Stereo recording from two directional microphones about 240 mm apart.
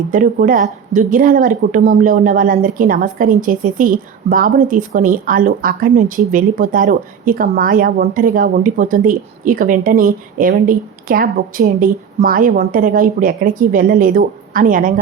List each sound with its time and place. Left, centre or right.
0.1 s speech: right